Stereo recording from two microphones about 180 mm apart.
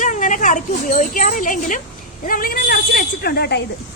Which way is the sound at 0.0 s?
45° left (ahead or behind).